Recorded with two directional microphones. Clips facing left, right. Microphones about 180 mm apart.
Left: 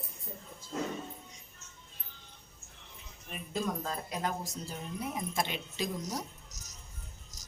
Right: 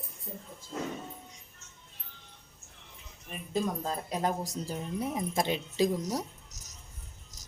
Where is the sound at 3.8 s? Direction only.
30° right (ahead or behind).